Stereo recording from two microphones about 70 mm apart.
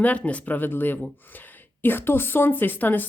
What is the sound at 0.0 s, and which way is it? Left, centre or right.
Speech, centre.